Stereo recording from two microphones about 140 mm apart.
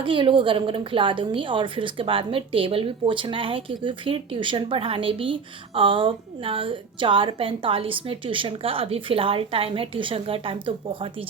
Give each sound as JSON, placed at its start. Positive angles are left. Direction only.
{"t": 0.0, "sound": "a woman's voice", "side_deg": -35}